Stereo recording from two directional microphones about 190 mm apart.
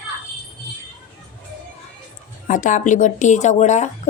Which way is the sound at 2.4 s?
40° left (ahead or behind).